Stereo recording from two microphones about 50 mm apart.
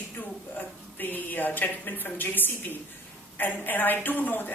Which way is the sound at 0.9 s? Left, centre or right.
Left.